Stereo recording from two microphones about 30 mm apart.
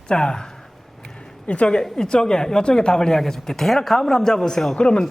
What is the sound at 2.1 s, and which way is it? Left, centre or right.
Speech, left.